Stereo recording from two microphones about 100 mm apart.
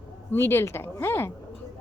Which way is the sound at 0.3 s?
25° left (ahead or behind).